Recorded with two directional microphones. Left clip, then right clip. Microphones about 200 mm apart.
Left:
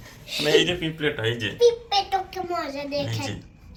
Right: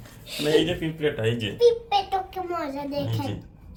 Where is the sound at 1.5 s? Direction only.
40° right (ahead or behind).